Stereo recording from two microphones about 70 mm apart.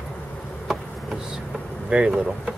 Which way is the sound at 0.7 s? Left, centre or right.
Centre.